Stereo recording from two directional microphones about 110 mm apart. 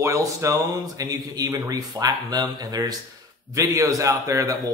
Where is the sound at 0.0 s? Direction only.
30° right (ahead or behind).